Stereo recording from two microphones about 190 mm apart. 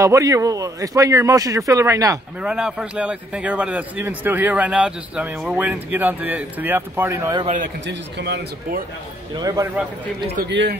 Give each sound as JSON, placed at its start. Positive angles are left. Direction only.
{"t": 0.0, "sound": "speech", "side_deg": -15}
{"t": 2.4, "sound": "speech", "side_deg": -5}
{"t": 7.4, "sound": "a man's voice", "side_deg": -45}
{"t": 7.8, "sound": "speech", "side_deg": -65}
{"t": 9.3, "sound": "a man's voice", "side_deg": -20}
{"t": 10.3, "sound": "speech", "side_deg": -60}